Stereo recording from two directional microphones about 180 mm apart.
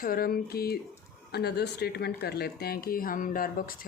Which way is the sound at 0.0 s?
55° left (ahead or behind).